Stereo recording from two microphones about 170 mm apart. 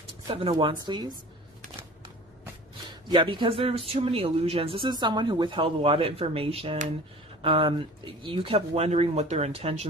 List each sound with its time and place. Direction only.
0.3 s a woman's voice: 30° right (ahead or behind)
3.1 s speech: 30° right (ahead or behind)